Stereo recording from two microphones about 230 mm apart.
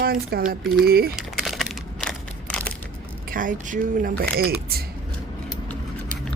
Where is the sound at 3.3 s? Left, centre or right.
Right.